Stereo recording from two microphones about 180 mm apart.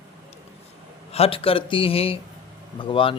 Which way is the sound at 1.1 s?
30° left (ahead or behind).